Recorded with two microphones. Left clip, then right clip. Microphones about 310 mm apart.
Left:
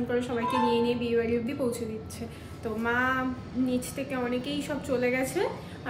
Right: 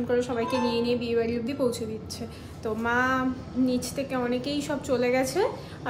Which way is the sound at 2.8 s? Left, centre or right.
Centre.